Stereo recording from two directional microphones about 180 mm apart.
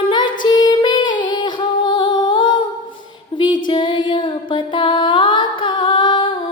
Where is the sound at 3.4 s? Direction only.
25° left (ahead or behind).